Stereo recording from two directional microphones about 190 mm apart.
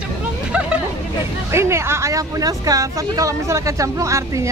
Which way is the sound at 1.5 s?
15° right (ahead or behind).